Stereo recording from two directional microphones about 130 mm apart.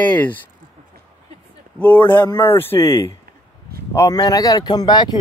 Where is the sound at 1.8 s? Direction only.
15° left (ahead or behind).